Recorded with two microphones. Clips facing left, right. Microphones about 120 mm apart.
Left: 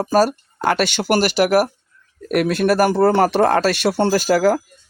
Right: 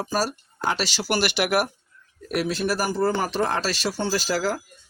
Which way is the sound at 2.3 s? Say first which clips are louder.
Left 8 dB; 55° left (ahead or behind).